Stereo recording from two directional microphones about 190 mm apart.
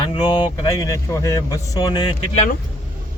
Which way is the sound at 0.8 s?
15° left (ahead or behind).